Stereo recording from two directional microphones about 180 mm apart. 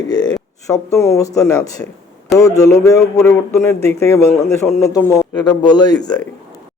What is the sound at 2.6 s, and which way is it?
Speech, 15° left (ahead or behind).